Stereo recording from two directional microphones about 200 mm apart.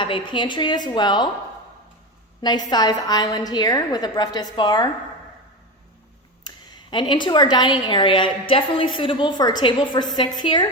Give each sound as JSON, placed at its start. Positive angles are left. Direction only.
{"t": 0.0, "sound": "a woman's voice", "side_deg": 25}
{"t": 2.4, "sound": "a woman's voice", "side_deg": 20}
{"t": 6.5, "sound": "a sound", "side_deg": 20}
{"t": 6.9, "sound": "a woman's voice", "side_deg": 25}